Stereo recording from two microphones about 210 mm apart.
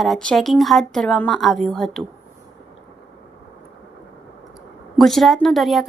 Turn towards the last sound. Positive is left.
turn(degrees=0)  # may be behind; listen again after turning